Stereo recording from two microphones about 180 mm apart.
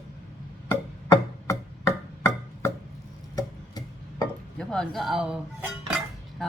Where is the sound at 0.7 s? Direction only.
15° left (ahead or behind).